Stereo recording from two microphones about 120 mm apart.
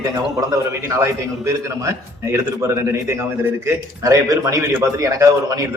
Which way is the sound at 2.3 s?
25° right (ahead or behind).